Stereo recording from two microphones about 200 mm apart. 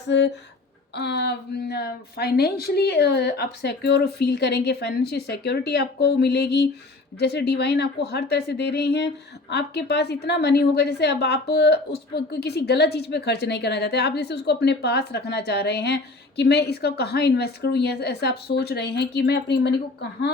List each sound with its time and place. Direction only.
0.1 s a woman's voice: 60° left (ahead or behind)